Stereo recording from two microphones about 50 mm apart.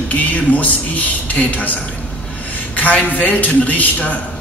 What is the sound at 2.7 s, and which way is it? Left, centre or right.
Speech, left.